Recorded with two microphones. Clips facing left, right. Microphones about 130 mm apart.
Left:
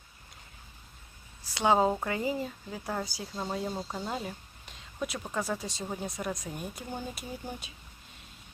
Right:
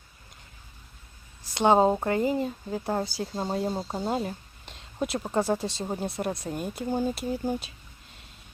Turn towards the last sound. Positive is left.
turn(degrees=-30)  # may be behind; listen again after turning